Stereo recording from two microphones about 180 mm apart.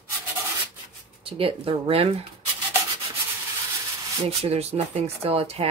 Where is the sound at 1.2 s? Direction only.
30° right (ahead or behind).